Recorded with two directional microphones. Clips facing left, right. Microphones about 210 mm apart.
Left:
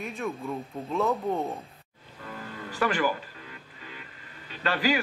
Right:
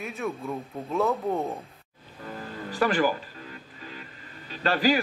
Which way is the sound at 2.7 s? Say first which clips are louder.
Right 3 dB; 35° right (ahead or behind).